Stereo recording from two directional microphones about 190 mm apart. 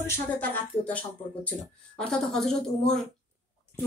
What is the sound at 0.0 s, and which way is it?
Speech, 10° left (ahead or behind).